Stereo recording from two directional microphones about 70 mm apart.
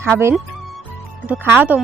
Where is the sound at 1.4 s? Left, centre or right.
Right.